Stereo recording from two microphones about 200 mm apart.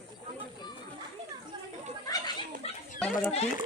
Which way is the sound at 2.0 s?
20° left (ahead or behind).